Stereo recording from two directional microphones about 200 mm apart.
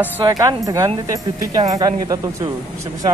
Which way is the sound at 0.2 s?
20° right (ahead or behind).